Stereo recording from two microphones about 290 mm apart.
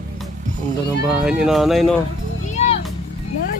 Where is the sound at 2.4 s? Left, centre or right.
Left.